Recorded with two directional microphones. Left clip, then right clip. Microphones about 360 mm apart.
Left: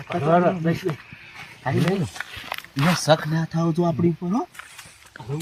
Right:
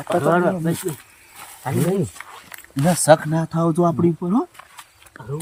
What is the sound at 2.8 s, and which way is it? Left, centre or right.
Speech, centre.